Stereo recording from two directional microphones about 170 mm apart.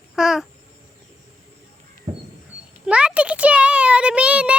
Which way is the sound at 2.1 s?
40° right (ahead or behind).